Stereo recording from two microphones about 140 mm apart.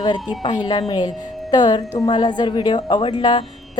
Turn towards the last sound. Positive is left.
turn(degrees=35)  # may be behind; listen again after turning